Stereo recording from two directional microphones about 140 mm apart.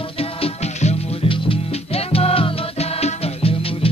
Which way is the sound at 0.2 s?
50° left (ahead or behind).